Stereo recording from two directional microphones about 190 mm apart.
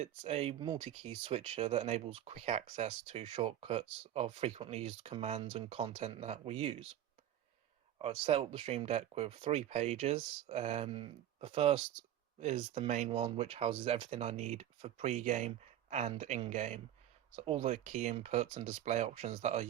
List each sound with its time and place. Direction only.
0.0 s speech: 30° right (ahead or behind)
7.9 s speech: 30° right (ahead or behind)